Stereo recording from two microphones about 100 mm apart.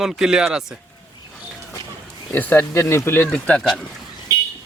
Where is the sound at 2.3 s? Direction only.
15° left (ahead or behind).